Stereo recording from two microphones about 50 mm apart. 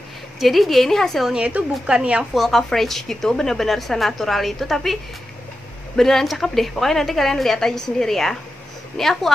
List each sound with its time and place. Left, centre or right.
0.4 s a woman's voice: centre
1.9 s a woman's voice: right
2.3 s a woman's voice: centre
5.9 s a woman's voice: centre